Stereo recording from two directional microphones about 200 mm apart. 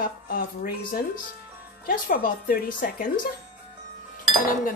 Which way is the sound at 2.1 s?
45° left (ahead or behind).